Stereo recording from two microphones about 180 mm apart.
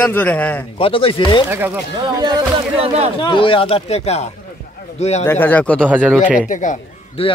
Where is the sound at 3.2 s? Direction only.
30° left (ahead or behind).